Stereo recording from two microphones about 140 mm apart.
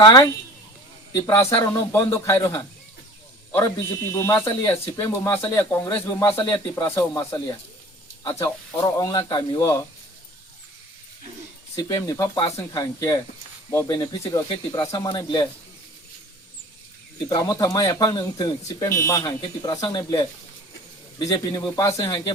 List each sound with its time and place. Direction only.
0.0 s speech: 25° left (ahead or behind)
4.0 s speech: 20° left (ahead or behind)
8.4 s speech: 25° left (ahead or behind)
11.8 s speech: 25° left (ahead or behind)
17.2 s speech: 30° left (ahead or behind)